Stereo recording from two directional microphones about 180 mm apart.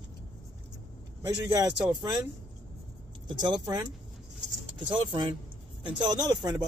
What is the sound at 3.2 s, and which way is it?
Speech, 25° right (ahead or behind).